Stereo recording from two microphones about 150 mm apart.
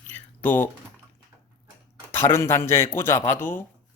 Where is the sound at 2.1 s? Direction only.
15° left (ahead or behind).